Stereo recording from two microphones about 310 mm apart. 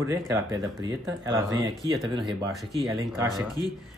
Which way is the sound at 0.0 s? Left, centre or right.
Centre.